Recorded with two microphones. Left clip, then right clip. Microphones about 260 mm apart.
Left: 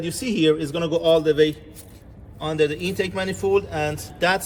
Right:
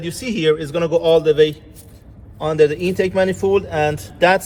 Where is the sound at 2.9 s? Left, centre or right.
Right.